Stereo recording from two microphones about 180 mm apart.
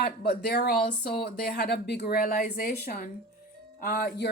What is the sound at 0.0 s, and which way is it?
A woman's voice, 60° left (ahead or behind).